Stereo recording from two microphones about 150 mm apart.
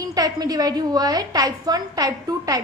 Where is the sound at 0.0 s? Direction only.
25° right (ahead or behind).